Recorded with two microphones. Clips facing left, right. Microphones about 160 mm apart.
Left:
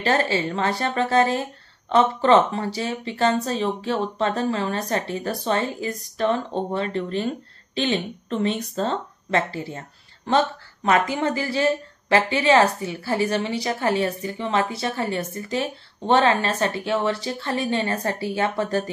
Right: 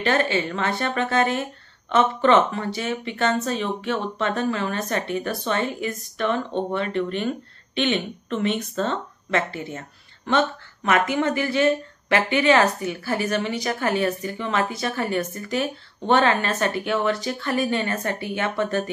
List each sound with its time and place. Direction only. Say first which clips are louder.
0.0 s speech: even; 35° left (ahead or behind)